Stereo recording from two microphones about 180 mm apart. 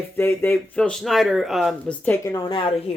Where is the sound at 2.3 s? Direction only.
25° left (ahead or behind).